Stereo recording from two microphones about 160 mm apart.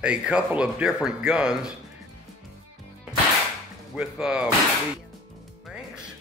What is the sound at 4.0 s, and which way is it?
Speech, 5° right (ahead or behind).